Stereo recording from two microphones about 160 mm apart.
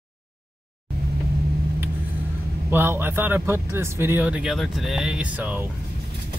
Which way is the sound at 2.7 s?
15° right (ahead or behind).